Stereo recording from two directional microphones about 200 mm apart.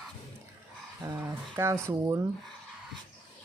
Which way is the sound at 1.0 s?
10° right (ahead or behind).